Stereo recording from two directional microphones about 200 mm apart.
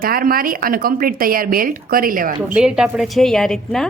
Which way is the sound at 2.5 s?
5° right (ahead or behind).